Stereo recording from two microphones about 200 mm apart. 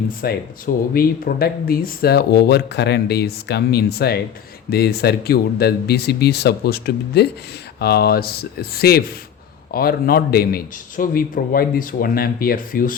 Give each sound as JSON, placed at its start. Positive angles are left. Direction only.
{"t": 0.2, "sound": "speech", "side_deg": 50}